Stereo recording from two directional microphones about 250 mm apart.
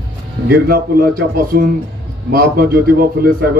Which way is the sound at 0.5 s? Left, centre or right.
Right.